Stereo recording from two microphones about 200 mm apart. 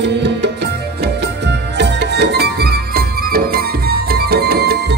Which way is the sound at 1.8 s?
55° right (ahead or behind).